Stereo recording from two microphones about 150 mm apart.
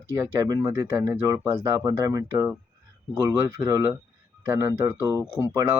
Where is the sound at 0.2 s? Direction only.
20° right (ahead or behind).